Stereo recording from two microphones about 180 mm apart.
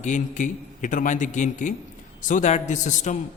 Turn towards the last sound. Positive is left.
turn(degrees=45)  # may be behind; listen again after turning